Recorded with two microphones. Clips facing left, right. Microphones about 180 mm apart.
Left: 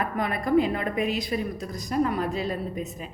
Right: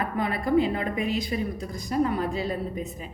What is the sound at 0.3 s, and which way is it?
Speech, 25° right (ahead or behind).